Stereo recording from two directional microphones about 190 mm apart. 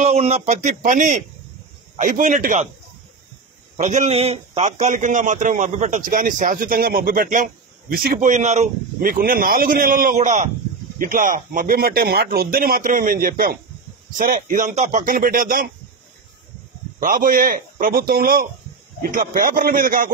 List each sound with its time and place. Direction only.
0.0 s speech: 35° right (ahead or behind)
3.7 s a man's voice: 40° right (ahead or behind)
17.0 s a man's voice: 45° right (ahead or behind)